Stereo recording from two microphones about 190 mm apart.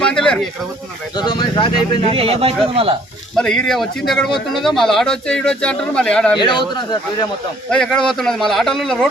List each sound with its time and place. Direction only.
0.0 s a sound: 5° left (ahead or behind)
1.1 s speech: 20° left (ahead or behind)
2.1 s speech: 30° right (ahead or behind)
3.3 s speech: 5° left (ahead or behind)
6.3 s speech: 25° left (ahead or behind)
7.7 s speech: 5° left (ahead or behind)